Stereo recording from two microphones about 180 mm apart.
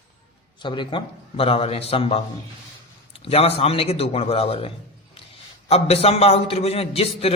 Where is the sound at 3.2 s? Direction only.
35° left (ahead or behind).